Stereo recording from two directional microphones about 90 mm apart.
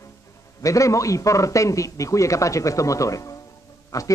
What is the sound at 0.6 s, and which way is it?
Speech, 35° left (ahead or behind).